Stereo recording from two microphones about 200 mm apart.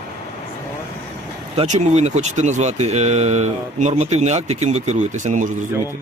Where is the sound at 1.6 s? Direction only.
35° right (ahead or behind).